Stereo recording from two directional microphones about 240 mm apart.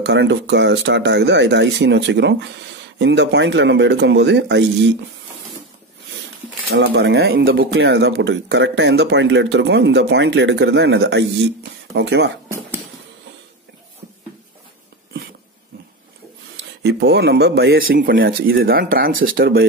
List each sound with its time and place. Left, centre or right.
0.0 s speech: right
6.7 s speech: right
16.8 s speech: right